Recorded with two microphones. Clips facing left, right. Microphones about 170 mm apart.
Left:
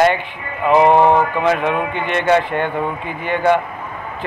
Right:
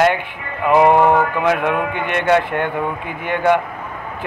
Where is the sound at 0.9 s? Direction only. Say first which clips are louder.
Left 1 dB; 20° left (ahead or behind).